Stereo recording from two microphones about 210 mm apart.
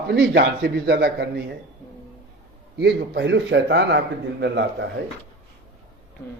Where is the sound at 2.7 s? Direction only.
55° right (ahead or behind).